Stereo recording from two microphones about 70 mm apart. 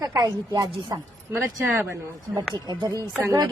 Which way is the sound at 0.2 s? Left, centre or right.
Right.